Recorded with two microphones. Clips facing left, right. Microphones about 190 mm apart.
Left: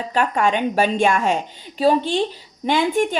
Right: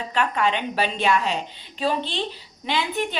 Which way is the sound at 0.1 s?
45° left (ahead or behind).